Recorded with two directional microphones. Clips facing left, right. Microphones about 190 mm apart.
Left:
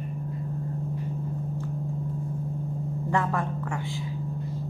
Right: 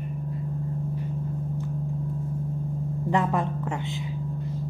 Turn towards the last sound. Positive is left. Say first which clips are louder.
# right 2 dB
turn(degrees=-20)  # may be behind; listen again after turning